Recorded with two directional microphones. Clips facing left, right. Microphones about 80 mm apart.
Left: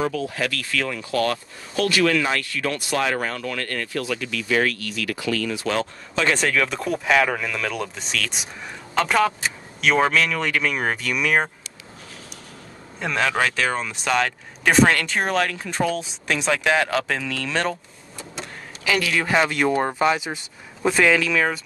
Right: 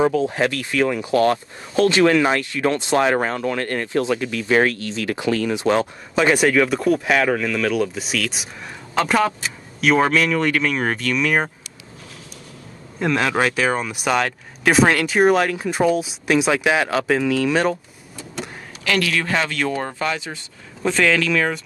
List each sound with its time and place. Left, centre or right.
0.0 s speech: right; by 11.5 s centre
13.0 s speech: centre
18.9 s speech: centre